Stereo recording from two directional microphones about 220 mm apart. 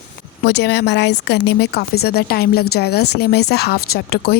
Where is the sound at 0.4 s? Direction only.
50° left (ahead or behind).